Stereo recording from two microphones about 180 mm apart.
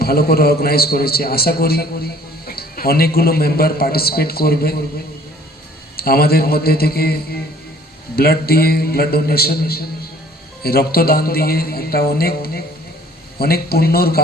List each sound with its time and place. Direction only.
0.0 s a man's voice: 60° left (ahead or behind)
6.0 s a man's voice: 60° left (ahead or behind)